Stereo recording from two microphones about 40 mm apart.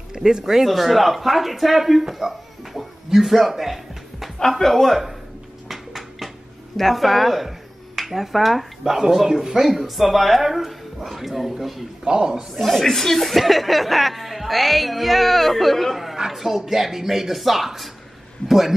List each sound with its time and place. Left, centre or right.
0.1 s speech: centre
4.4 s speech: centre
5.7 s a sound: centre
6.8 s speech: centre
12.0 s a man's voice: right
12.5 s speech: centre